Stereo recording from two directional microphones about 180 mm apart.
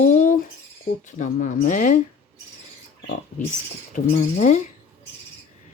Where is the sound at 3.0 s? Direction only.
50° left (ahead or behind).